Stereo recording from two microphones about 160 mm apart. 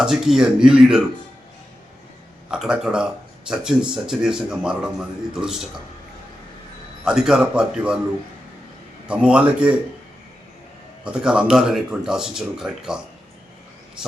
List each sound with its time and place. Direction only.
0.0 s speech: 5° right (ahead or behind)
2.5 s speech: 5° right (ahead or behind)
7.0 s speech: 5° right (ahead or behind)
9.0 s a man's voice: 5° right (ahead or behind)
11.0 s speech: 5° right (ahead or behind)